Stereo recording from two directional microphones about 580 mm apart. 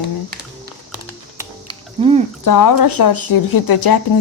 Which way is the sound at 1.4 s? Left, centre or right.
Centre.